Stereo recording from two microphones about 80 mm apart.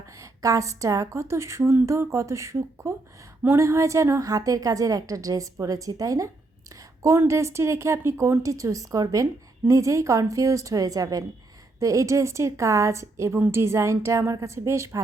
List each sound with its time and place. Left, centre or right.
0.2 s a woman's voice: right